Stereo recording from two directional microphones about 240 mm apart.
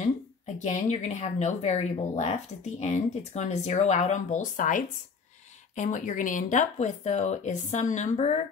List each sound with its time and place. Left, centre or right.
0.6 s speech: left